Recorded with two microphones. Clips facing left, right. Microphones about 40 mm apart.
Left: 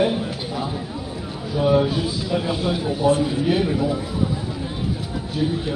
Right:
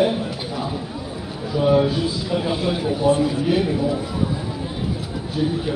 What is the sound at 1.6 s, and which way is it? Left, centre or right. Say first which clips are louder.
Speech: right 1 dB; centre.